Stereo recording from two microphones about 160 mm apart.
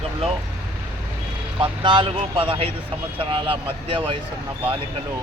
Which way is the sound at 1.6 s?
30° right (ahead or behind).